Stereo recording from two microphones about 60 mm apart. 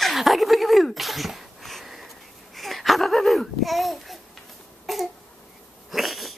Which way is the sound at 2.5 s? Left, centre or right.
Centre.